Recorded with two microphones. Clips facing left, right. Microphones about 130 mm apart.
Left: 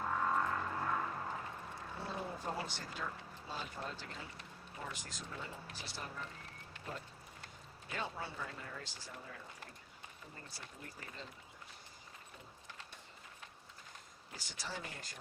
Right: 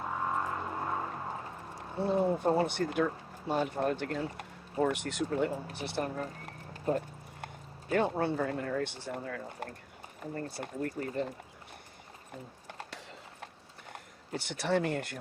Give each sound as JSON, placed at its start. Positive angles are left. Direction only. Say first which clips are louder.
{"t": 0.0, "sound": "music", "louder": "right 2 dB", "side_deg": -15}
{"t": 2.0, "sound": "speech", "louder": "right 16 dB", "side_deg": -60}
{"t": 6.2, "sound": "clip-clop", "louder": "right 9 dB", "side_deg": -40}
{"t": 7.4, "sound": "speech", "louder": "right 15 dB", "side_deg": -60}
{"t": 12.3, "sound": "clip-clop", "louder": "right 13 dB", "side_deg": -75}
{"t": 13.9, "sound": "speech", "louder": "right 17 dB", "side_deg": -65}